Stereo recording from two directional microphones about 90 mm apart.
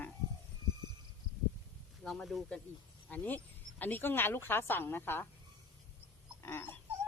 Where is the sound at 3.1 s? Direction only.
20° left (ahead or behind).